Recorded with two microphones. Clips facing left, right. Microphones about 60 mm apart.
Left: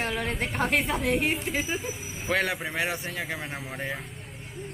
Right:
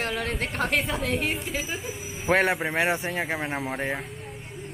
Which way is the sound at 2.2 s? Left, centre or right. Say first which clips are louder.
Right 5 dB; right.